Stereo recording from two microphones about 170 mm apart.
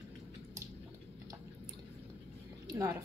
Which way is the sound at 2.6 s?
20° right (ahead or behind).